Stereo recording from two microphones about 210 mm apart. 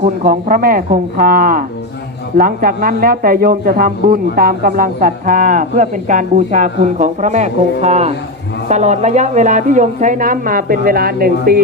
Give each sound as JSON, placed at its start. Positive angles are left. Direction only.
{"t": 0.0, "sound": "speech", "side_deg": -40}